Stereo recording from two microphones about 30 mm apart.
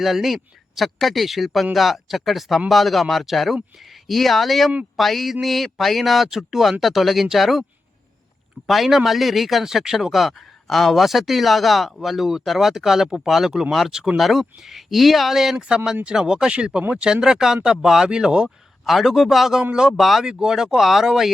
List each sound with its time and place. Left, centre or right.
0.0 s speech: centre
8.6 s speech: centre
14.2 s speech: centre
15.5 s speech: right
18.0 s speech: right
18.4 s speech: centre
19.5 s speech: right
20.0 s speech: centre
20.2 s speech: centre